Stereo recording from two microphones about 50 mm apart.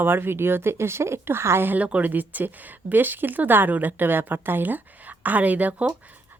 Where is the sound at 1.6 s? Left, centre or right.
Right.